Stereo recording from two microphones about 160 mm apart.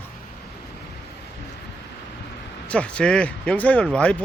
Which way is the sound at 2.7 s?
5° left (ahead or behind).